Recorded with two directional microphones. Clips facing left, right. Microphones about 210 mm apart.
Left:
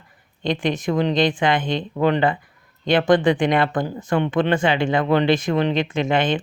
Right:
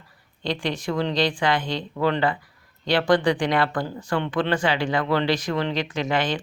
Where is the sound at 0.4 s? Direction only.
20° left (ahead or behind).